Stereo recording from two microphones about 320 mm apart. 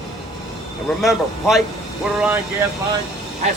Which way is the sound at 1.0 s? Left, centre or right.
Centre.